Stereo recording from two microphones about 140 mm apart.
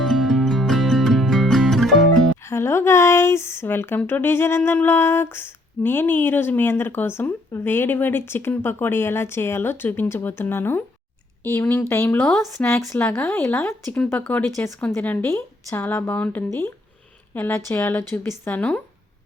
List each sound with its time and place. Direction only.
0.0 s music: centre (ahead or behind)
2.4 s speech: 20° left (ahead or behind); by 12.6 s centre (ahead or behind)
12.6 s speech: 20° left (ahead or behind)